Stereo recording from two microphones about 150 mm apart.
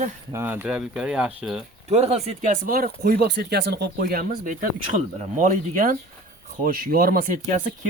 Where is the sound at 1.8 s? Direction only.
45° right (ahead or behind); by 2.9 s 70° right (ahead or behind).